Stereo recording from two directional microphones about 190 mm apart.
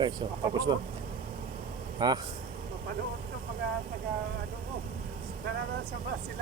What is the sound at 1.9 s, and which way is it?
Speech, 20° right (ahead or behind).